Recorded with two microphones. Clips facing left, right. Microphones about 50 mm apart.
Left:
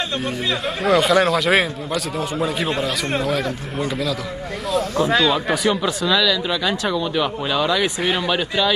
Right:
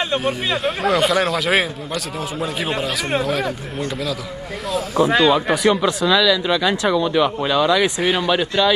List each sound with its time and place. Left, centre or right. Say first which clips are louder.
0.7 s speech: left 1 dB; centre
5.0 s speech: right 4 dB; centre
5.5 s speech: right 3 dB; centre